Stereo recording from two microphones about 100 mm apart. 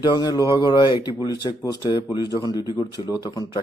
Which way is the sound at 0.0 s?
45° left (ahead or behind).